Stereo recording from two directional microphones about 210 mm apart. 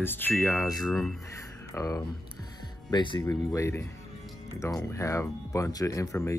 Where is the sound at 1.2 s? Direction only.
15° left (ahead or behind).